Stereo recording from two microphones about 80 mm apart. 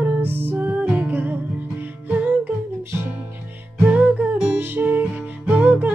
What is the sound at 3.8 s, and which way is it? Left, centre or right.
Music, centre.